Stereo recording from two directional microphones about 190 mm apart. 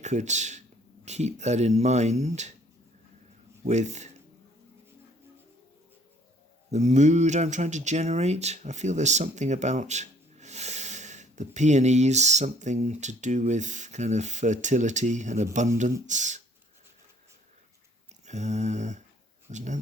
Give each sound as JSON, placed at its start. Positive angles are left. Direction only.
{"t": 0.0, "sound": "speech", "side_deg": -40}
{"t": 3.6, "sound": "speech", "side_deg": -35}
{"t": 6.7, "sound": "speech", "side_deg": -35}
{"t": 18.3, "sound": "speech", "side_deg": -35}